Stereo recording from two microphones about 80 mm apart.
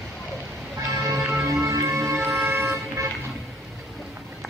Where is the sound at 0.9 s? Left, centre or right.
Right.